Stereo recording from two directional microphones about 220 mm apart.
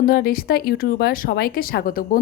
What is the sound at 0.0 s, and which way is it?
A woman's voice, 45° left (ahead or behind).